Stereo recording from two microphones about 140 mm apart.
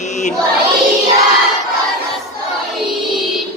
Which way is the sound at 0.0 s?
60° left (ahead or behind).